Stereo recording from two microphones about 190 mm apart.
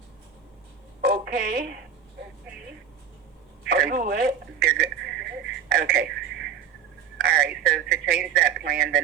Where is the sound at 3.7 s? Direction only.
55° right (ahead or behind).